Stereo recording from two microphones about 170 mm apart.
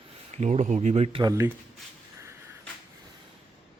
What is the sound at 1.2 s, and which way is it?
Speech, 20° right (ahead or behind).